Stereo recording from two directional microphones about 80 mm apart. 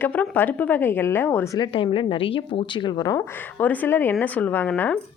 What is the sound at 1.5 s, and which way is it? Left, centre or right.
Speech, left.